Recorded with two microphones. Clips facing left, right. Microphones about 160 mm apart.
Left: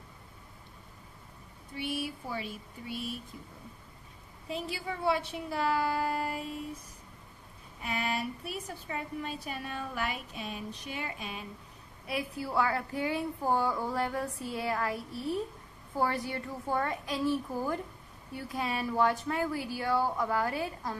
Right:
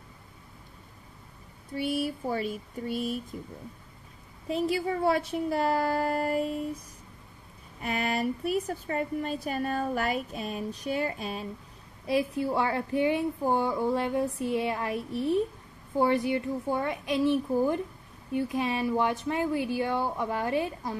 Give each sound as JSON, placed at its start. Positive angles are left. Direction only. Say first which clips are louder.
{"t": 1.8, "sound": "a woman's voice", "louder": "right 6 dB", "side_deg": -40}
{"t": 4.5, "sound": "a woman's voice", "louder": "right 9 dB", "side_deg": -45}
{"t": 7.8, "sound": "a woman's voice", "louder": "right 5 dB", "side_deg": -45}
{"t": 12.1, "sound": "a woman's voice", "louder": "right 8 dB", "side_deg": -25}